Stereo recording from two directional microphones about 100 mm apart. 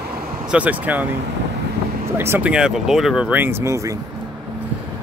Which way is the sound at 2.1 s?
25° right (ahead or behind).